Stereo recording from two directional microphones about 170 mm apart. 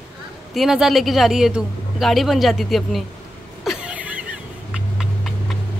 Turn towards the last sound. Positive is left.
turn(degrees=-5)  # may be behind; listen again after turning